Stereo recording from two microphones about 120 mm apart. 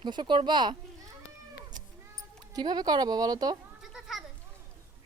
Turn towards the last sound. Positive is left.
turn(degrees=-5)  # may be behind; listen again after turning